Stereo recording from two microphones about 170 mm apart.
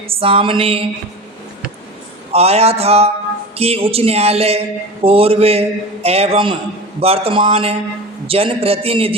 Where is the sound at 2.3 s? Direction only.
35° right (ahead or behind).